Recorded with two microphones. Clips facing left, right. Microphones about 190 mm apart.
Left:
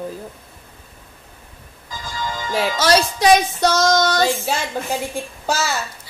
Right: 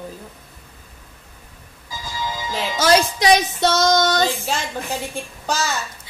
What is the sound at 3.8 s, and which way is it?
Child singing, 20° right (ahead or behind).